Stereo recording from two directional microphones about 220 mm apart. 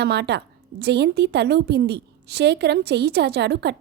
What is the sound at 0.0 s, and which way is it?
A woman's voice, 50° right (ahead or behind).